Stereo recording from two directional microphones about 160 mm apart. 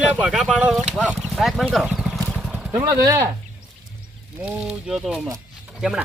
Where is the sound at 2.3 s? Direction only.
5° right (ahead or behind).